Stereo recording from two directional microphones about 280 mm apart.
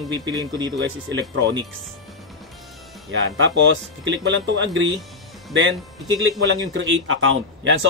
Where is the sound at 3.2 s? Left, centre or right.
Right.